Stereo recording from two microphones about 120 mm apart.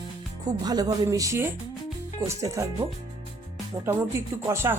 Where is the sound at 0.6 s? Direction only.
35° right (ahead or behind).